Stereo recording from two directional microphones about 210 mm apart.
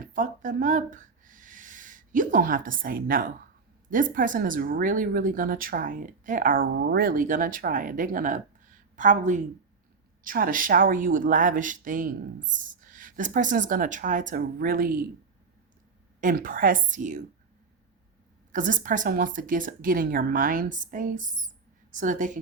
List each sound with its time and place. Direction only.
0.1 s speech: 40° right (ahead or behind)
16.2 s speech: 40° right (ahead or behind)
18.5 s speech: 40° right (ahead or behind)